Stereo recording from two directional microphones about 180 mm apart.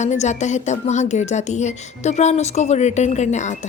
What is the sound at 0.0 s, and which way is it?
Speech, 40° left (ahead or behind).